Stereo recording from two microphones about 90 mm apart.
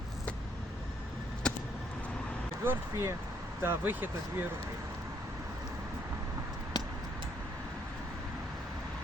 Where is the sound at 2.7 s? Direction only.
25° right (ahead or behind).